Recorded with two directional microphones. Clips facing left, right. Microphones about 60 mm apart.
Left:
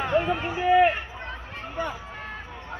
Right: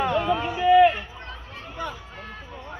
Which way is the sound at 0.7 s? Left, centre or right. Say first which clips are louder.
Right 3 dB; left.